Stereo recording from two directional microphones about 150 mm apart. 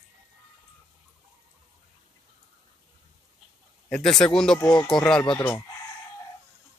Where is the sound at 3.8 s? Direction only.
5° left (ahead or behind).